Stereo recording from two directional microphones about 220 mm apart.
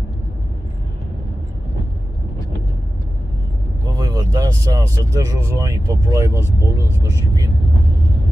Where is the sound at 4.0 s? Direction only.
15° right (ahead or behind).